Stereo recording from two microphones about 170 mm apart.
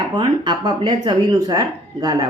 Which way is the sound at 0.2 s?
25° right (ahead or behind).